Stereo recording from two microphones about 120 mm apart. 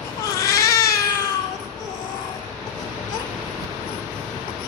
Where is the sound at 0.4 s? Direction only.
25° left (ahead or behind).